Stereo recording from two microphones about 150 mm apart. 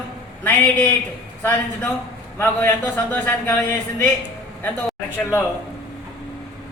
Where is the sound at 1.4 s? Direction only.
15° left (ahead or behind).